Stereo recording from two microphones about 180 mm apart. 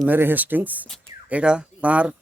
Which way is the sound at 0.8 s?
5° left (ahead or behind).